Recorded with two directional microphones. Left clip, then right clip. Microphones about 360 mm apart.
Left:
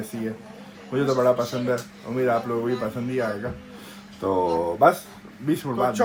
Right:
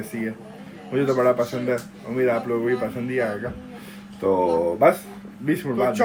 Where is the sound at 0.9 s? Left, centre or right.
Centre.